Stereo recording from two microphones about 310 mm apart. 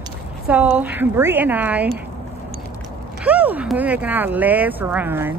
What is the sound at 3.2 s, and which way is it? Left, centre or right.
Speech, centre.